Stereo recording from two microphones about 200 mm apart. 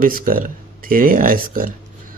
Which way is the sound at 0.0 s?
45° right (ahead or behind).